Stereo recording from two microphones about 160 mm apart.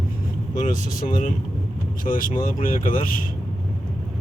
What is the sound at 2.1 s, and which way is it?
Speech, 55° left (ahead or behind).